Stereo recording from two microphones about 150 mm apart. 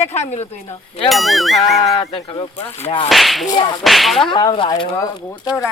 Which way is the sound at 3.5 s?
30° left (ahead or behind).